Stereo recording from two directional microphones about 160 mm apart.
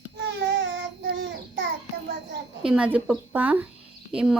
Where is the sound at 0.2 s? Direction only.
90° right.